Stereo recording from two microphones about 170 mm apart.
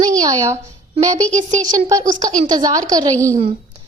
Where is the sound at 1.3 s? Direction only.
45° right (ahead or behind).